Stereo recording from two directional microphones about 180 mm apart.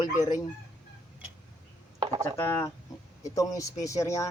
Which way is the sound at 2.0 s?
20° right (ahead or behind).